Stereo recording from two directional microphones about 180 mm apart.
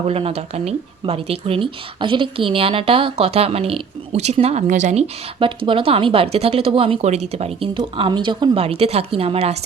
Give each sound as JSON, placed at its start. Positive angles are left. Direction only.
{"t": 0.1, "sound": "speech", "side_deg": -35}
{"t": 5.6, "sound": "speech", "side_deg": -30}